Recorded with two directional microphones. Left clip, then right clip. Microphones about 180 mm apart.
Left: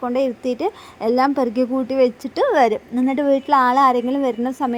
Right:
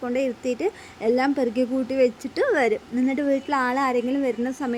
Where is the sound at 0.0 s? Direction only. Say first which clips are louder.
Left 5 dB; 20° left (ahead or behind).